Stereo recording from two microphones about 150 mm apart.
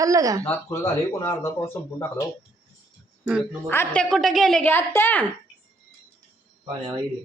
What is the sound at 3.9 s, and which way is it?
Speech, 5° left (ahead or behind).